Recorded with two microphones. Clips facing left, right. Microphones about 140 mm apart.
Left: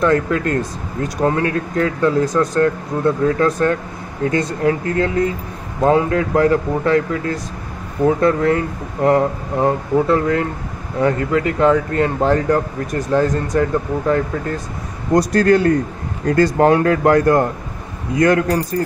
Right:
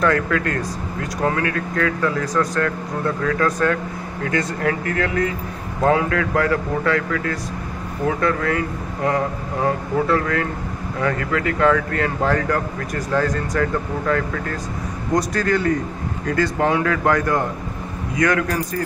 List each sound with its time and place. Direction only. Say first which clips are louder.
0.0 s speech: left 3 dB; 30° left (ahead or behind)
15.1 s a man's voice: left 7 dB; 40° left (ahead or behind)
18.2 s a man's voice: left 5 dB; 35° left (ahead or behind)